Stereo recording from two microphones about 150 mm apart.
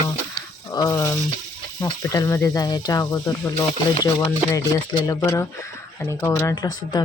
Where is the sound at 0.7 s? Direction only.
25° left (ahead or behind).